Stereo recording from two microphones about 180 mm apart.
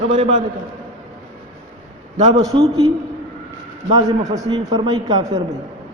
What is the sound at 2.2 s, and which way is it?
Speech, 35° right (ahead or behind).